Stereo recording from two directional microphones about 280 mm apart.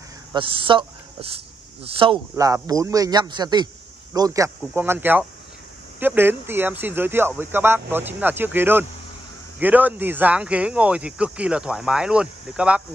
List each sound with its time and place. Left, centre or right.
0.3 s speech: centre